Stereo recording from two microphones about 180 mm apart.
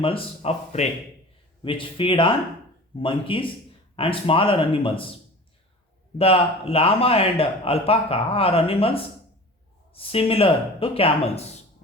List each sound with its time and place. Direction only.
0.0 s a man's voice: 35° left (ahead or behind)
6.1 s a man's voice: 35° left (ahead or behind)